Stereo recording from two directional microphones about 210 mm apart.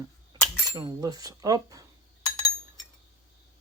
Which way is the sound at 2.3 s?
15° left (ahead or behind).